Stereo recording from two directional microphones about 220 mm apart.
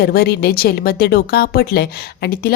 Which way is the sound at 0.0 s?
45° left (ahead or behind).